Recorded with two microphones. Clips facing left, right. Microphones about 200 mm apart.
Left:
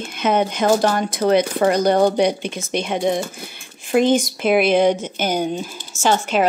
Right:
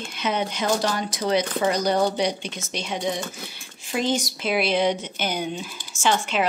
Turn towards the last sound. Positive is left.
turn(degrees=45)  # may be behind; listen again after turning